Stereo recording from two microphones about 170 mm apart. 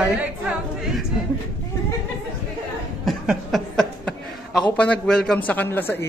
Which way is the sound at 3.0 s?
Centre (ahead or behind).